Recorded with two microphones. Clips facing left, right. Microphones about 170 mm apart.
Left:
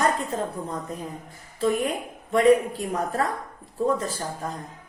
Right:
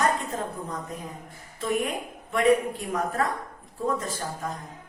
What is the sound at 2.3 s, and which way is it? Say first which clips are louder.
Speech: left 3 dB; 35° left (ahead or behind).